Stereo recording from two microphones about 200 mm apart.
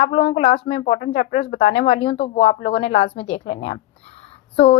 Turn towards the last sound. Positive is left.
turn(degrees=30)  # may be behind; listen again after turning